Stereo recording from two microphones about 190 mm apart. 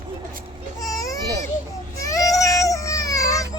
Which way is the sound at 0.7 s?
20° left (ahead or behind).